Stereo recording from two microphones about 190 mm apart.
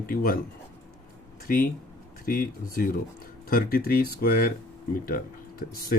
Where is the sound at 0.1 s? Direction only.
50° left (ahead or behind).